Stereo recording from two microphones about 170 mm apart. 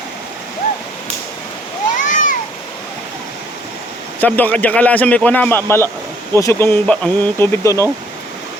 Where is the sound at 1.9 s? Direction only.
50° left (ahead or behind).